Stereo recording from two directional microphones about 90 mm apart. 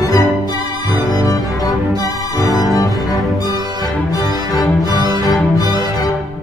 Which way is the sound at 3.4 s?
45° left (ahead or behind).